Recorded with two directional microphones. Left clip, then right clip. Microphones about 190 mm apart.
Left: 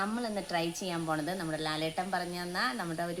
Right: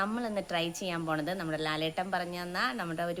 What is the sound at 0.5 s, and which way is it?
Speech, 5° right (ahead or behind).